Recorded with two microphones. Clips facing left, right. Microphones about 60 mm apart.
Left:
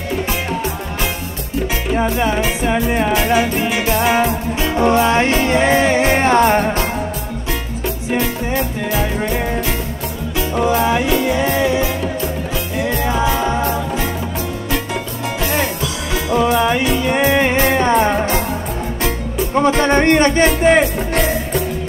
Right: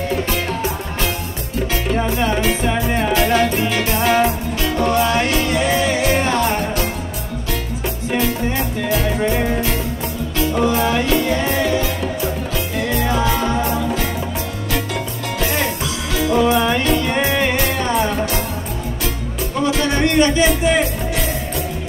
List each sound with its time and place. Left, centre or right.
1.9 s music: centre
4.7 s music: left
8.1 s music: centre
16.2 s music: centre; by 21.2 s left